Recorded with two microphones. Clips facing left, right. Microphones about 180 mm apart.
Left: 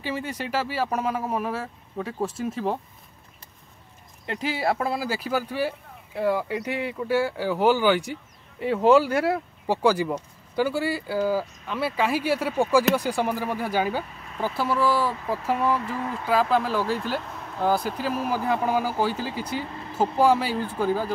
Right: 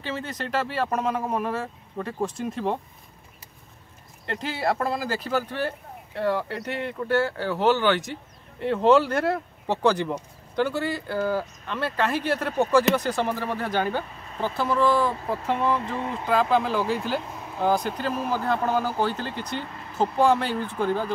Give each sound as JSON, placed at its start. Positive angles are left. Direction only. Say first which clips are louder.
{"t": 0.0, "sound": "speech", "louder": "left 1 dB", "side_deg": 10}
{"t": 4.3, "sound": "speech", "louder": "left 1 dB", "side_deg": 5}
{"t": 15.8, "sound": "speech", "louder": "even", "side_deg": -25}
{"t": 16.3, "sound": "speech", "louder": "even", "side_deg": 5}